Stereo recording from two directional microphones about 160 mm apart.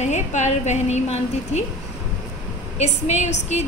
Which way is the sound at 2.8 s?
45° left (ahead or behind).